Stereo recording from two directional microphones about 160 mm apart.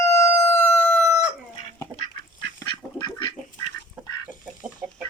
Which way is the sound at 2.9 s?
30° left (ahead or behind).